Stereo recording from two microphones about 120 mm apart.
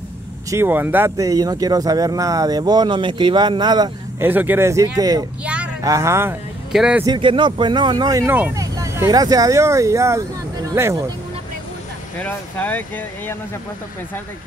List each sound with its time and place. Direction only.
0.5 s speech: 20° right (ahead or behind); by 3.9 s 35° right (ahead or behind)
4.2 s speech: 15° right (ahead or behind); by 5.2 s 30° right (ahead or behind)
5.4 s a sound: 10° right (ahead or behind)
5.8 s speech: 25° right (ahead or behind)
6.7 s speech: 5° right (ahead or behind)
7.1 s speech: 45° right (ahead or behind)
8.3 s speech: 15° right (ahead or behind)
8.5 s speech: 25° right (ahead or behind)
12.2 s speech: 15° left (ahead or behind)